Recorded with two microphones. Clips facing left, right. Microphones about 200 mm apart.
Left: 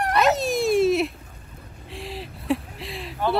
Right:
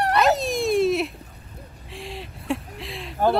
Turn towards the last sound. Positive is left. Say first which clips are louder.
# even
turn(degrees=0)  # may be behind; listen again after turning